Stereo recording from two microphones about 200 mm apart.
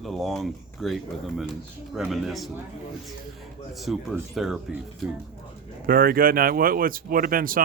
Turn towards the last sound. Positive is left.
turn(degrees=-45)  # may be behind; listen again after turning